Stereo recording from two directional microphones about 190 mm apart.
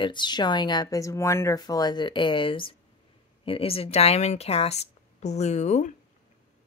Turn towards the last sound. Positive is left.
turn(degrees=40)  # may be behind; listen again after turning